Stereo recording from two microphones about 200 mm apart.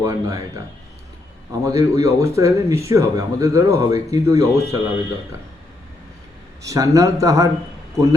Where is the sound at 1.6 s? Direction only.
15° right (ahead or behind).